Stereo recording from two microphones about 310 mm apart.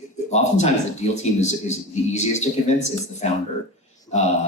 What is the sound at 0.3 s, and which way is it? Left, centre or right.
Speech, left.